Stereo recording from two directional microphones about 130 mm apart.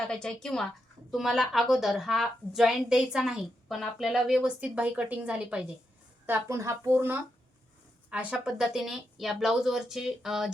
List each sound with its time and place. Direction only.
0.1 s a woman's voice: 5° left (ahead or behind)
6.2 s a woman's voice: 20° right (ahead or behind); by 10.5 s 5° right (ahead or behind)